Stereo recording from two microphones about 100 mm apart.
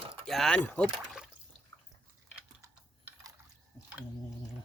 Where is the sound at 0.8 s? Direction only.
5° right (ahead or behind).